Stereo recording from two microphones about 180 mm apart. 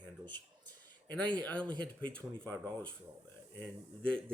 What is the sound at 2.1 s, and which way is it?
Speech, 10° left (ahead or behind).